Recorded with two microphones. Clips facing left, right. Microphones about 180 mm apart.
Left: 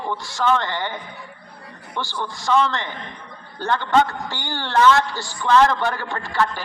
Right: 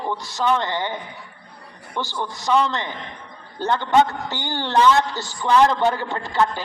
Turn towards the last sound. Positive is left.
turn(degrees=-20)  # may be behind; listen again after turning